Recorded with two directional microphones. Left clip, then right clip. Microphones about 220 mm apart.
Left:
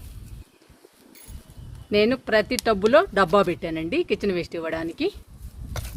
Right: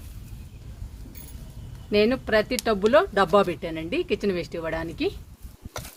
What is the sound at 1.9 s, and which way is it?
Speech, 45° left (ahead or behind).